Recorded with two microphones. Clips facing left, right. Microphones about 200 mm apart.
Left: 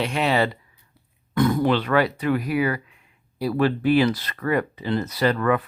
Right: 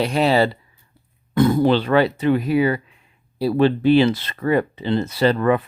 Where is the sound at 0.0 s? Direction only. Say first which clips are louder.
Right 4 dB; 35° right (ahead or behind).